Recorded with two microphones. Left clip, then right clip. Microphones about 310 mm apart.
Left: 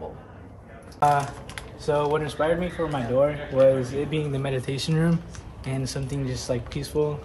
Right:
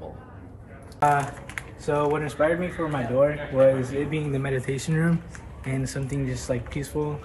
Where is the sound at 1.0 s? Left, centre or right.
Centre.